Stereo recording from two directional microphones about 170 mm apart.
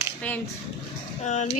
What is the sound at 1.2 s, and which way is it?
Speech, 45° left (ahead or behind).